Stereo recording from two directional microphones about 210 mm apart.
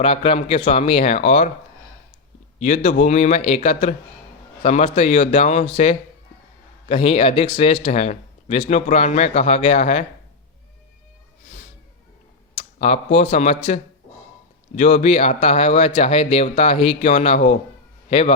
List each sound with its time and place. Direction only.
0.0 s speech: 25° left (ahead or behind)
2.6 s a man's voice: 35° left (ahead or behind)
12.5 s speech: 30° left (ahead or behind)
14.8 s speech: 35° left (ahead or behind)